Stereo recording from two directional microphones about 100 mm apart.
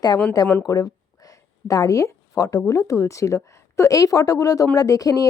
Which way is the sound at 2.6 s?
30° left (ahead or behind).